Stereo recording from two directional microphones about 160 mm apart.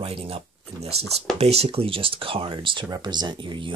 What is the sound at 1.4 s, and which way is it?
Speech, 40° right (ahead or behind).